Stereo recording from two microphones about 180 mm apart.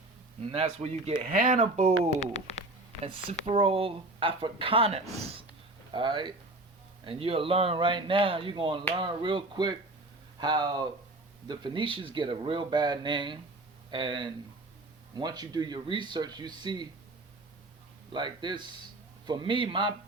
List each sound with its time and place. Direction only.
0.5 s speech: 35° right (ahead or behind)
1.3 s speech: 50° right (ahead or behind)
3.0 s speech: 30° right (ahead or behind)
18.1 s speech: 25° right (ahead or behind)